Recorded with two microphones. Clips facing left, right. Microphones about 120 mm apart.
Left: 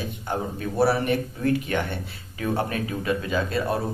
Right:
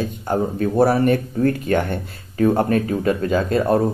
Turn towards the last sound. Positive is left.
turn(degrees=-45)  # may be behind; listen again after turning